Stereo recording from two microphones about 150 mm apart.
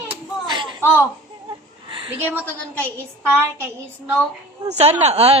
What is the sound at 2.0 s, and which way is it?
Speech, 10° right (ahead or behind).